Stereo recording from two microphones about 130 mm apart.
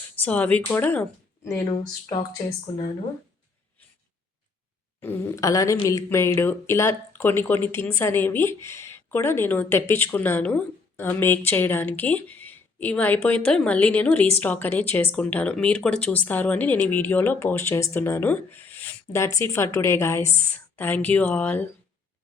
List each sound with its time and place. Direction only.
0.2 s speech: 10° left (ahead or behind)
4.9 s speech: 20° left (ahead or behind)